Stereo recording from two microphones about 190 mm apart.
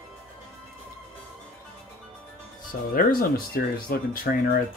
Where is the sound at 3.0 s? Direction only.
50° left (ahead or behind).